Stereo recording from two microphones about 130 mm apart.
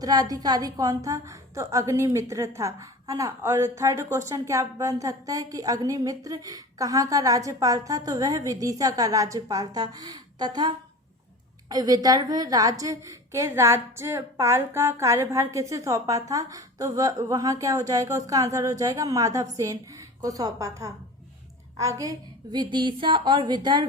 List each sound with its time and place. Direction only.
0.0 s a woman's voice: 30° right (ahead or behind)
22.5 s a woman's voice: 35° right (ahead or behind)